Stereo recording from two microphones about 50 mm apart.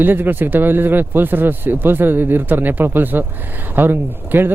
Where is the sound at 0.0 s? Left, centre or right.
Right.